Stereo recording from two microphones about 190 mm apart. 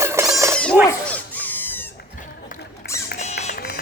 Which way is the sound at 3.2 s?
35° left (ahead or behind).